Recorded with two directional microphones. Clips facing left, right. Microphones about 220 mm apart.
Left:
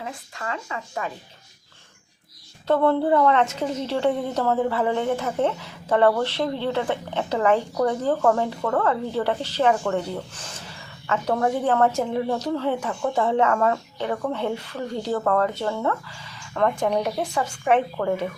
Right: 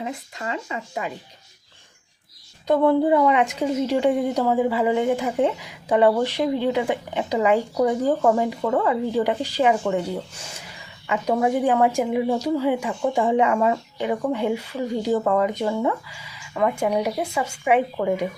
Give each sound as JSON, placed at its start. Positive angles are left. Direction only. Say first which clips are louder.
{"t": 0.0, "sound": "speech", "louder": "right 3 dB", "side_deg": -20}
{"t": 2.6, "sound": "a woman's voice", "louder": "right 2 dB", "side_deg": -15}